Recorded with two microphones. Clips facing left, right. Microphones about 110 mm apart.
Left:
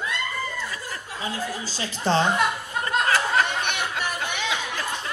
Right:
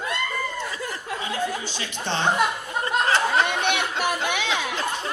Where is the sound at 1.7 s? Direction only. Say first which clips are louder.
Left 5 dB; 35° left (ahead or behind).